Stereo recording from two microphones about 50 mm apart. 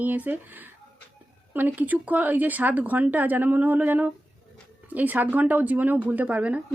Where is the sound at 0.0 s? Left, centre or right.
Right.